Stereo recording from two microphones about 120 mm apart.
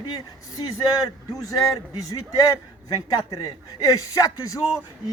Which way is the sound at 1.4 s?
30° left (ahead or behind).